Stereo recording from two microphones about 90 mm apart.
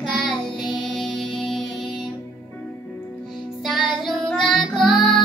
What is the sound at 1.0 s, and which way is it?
Music, 5° left (ahead or behind).